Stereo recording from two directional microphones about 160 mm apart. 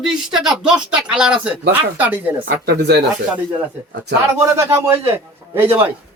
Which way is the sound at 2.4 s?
90° right.